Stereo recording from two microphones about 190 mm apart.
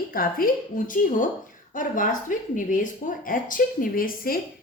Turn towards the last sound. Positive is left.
turn(degrees=50)  # may be behind; listen again after turning